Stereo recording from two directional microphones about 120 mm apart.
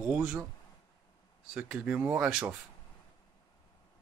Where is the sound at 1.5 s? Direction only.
5° right (ahead or behind).